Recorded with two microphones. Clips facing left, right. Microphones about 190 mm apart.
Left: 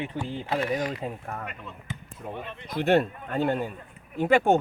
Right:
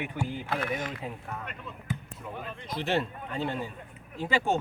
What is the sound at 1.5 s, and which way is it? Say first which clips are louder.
Speech: right 1 dB; centre (ahead or behind).